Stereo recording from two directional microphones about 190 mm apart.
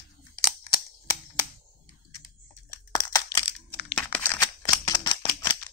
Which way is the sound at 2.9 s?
20° left (ahead or behind).